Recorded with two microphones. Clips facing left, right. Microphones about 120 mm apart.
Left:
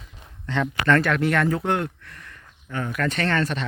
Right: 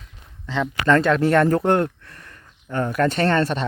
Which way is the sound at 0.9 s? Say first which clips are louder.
Right 4 dB; 20° right (ahead or behind).